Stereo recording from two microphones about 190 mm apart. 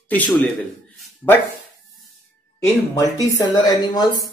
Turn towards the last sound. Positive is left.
turn(degrees=20)  # may be behind; listen again after turning